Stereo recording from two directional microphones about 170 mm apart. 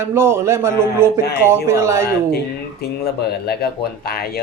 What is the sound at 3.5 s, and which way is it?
Speech, 65° left (ahead or behind).